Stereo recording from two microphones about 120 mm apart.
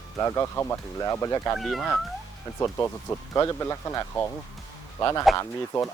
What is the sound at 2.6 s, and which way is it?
Speech, 20° left (ahead or behind).